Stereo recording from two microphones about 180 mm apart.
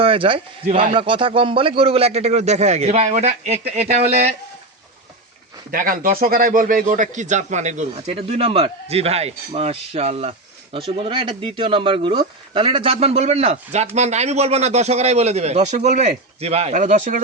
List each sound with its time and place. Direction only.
0.0 s a man's voice: 30° right (ahead or behind)
5.7 s a man's voice: 50° right (ahead or behind)